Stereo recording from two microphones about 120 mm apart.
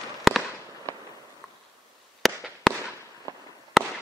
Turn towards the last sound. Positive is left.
turn(degrees=0)  # may be behind; listen again after turning